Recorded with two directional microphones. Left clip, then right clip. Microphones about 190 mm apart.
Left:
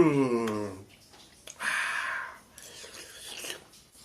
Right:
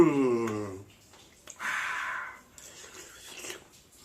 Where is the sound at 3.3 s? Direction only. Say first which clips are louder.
Left 3 dB; 20° left (ahead or behind).